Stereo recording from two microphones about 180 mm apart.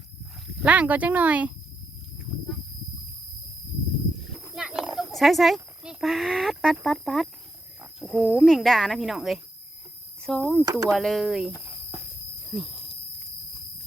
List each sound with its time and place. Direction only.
0.6 s speech: 10° right (ahead or behind)
4.5 s a sound: 5° right (ahead or behind)
5.1 s speech: centre (ahead or behind)
10.6 s speech: 20° right (ahead or behind)
10.9 s speech: centre (ahead or behind)